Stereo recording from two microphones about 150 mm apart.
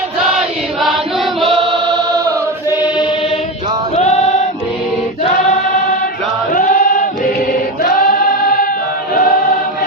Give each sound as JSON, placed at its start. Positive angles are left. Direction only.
{"t": 0.3, "sound": "chant", "side_deg": 0}
{"t": 5.5, "sound": "choir", "side_deg": 60}
{"t": 6.5, "sound": "chant", "side_deg": 65}
{"t": 7.8, "sound": "choir", "side_deg": 70}